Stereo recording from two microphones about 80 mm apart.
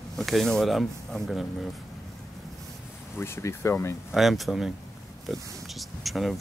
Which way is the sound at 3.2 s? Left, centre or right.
Left.